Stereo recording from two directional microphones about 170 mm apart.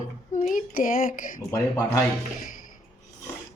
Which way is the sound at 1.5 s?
20° left (ahead or behind).